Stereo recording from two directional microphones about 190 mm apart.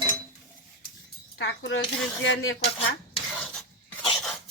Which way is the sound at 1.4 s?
70° left (ahead or behind).